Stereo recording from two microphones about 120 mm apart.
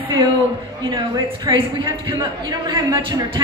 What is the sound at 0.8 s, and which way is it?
Speech, 35° right (ahead or behind).